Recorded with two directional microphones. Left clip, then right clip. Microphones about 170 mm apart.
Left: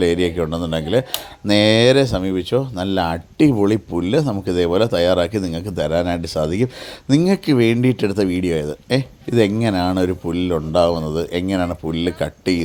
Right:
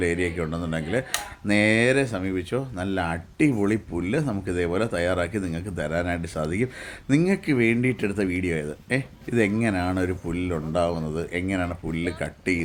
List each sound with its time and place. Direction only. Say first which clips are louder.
0.0 s speech: left 8 dB; 35° left (ahead or behind)